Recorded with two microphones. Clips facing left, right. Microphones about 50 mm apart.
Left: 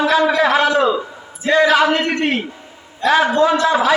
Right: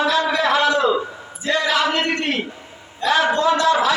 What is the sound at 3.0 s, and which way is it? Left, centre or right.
Speech, centre.